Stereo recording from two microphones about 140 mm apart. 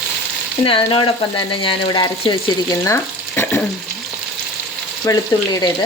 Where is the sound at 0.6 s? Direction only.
40° left (ahead or behind).